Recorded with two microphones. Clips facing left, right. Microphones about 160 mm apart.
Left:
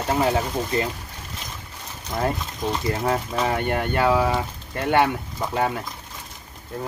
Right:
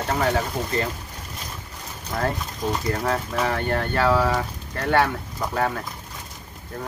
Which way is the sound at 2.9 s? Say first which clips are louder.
Left 1 dB; 20° left (ahead or behind).